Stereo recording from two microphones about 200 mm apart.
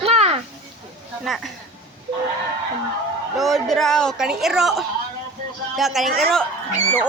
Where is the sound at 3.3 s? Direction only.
Centre (ahead or behind).